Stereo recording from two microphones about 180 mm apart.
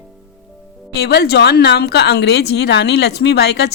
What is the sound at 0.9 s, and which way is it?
A woman's voice, 60° left (ahead or behind).